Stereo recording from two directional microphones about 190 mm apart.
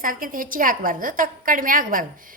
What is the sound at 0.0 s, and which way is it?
A woman's voice, 45° right (ahead or behind).